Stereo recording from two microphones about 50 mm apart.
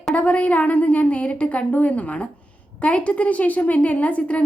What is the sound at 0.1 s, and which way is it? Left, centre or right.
A woman's voice, left.